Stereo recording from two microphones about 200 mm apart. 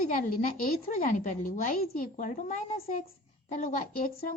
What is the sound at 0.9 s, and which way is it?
A woman's voice, 40° left (ahead or behind).